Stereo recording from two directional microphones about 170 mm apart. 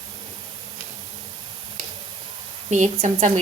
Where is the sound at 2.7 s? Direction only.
45° right (ahead or behind).